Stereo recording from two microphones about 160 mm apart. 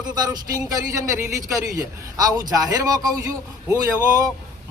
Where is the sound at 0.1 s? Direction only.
25° right (ahead or behind).